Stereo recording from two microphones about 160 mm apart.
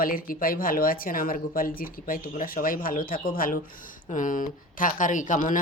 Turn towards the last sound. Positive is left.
turn(degrees=55)  # may be behind; listen again after turning